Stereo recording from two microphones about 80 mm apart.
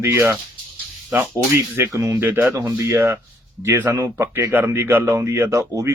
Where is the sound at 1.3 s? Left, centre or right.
Right.